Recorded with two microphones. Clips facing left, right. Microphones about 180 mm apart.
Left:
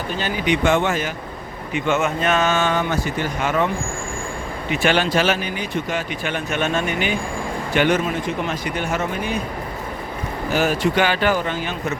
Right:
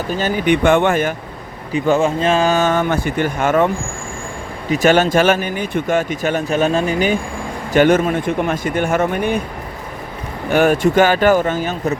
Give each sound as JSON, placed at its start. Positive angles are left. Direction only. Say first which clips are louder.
{"t": 0.1, "sound": "speech", "louder": "right 6 dB", "side_deg": -45}
{"t": 1.7, "sound": "speech", "louder": "right 5 dB", "side_deg": -30}
{"t": 4.7, "sound": "speech", "louder": "right 6 dB", "side_deg": -40}
{"t": 10.5, "sound": "speech", "louder": "right 6 dB", "side_deg": -55}